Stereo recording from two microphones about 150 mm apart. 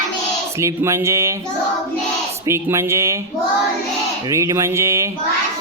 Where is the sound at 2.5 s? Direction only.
20° right (ahead or behind).